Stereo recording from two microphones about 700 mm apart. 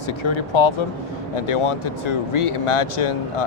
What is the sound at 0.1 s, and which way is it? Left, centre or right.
Speech, left.